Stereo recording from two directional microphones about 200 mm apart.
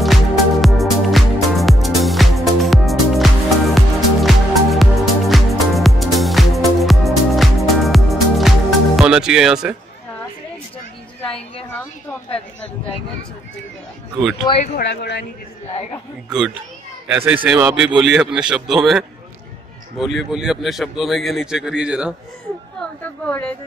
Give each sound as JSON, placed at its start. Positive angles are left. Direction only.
{"t": 0.0, "sound": "music", "side_deg": 0}
{"t": 11.2, "sound": "a sound", "side_deg": 30}
{"t": 14.8, "sound": "speech", "side_deg": 60}
{"t": 15.7, "sound": "a man's voice", "side_deg": 30}
{"t": 16.3, "sound": "a man's voice", "side_deg": -5}
{"t": 22.8, "sound": "a man's voice", "side_deg": 5}